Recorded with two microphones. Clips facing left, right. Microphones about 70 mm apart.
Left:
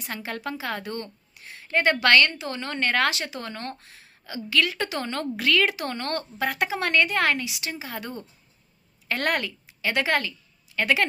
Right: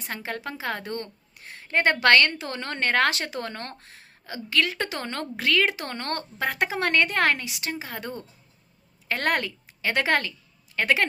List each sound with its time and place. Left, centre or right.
0.0 s a woman's voice: right